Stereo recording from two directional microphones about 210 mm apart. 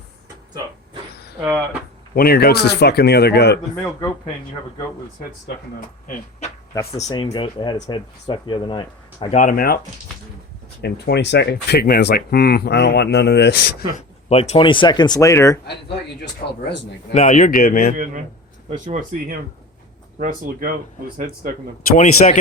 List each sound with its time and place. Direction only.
1.5 s speech: 10° right (ahead or behind)
2.1 s speech: 45° left (ahead or behind)
7.1 s speech: 25° left (ahead or behind)
9.3 s speech: 40° left (ahead or behind)
10.8 s speech: 55° left (ahead or behind)
14.3 s speech: 30° left (ahead or behind); by 15.5 s 15° left (ahead or behind)
16.4 s speech: 35° left (ahead or behind)
17.9 s speech: 40° right (ahead or behind)
21.9 s speech: 35° left (ahead or behind)